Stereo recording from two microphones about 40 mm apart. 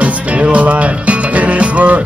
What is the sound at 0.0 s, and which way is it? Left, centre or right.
Music, right.